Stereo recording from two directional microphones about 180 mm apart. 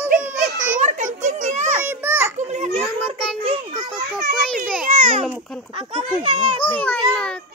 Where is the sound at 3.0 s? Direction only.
35° right (ahead or behind).